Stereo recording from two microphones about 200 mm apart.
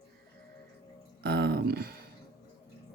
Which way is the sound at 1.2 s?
50° right (ahead or behind).